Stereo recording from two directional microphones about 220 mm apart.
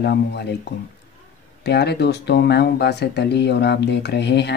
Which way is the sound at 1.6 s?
50° left (ahead or behind).